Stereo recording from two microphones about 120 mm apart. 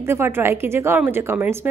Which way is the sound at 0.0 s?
20° right (ahead or behind).